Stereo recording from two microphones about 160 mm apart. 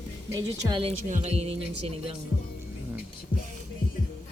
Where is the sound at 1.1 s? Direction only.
40° right (ahead or behind).